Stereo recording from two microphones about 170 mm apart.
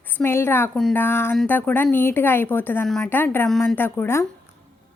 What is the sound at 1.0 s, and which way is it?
A woman's voice, 15° left (ahead or behind).